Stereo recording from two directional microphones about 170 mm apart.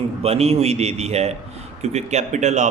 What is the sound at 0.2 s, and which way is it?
A man's voice, 35° right (ahead or behind).